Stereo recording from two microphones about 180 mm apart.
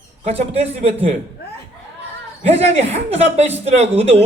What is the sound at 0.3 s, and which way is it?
Speech, 35° right (ahead or behind).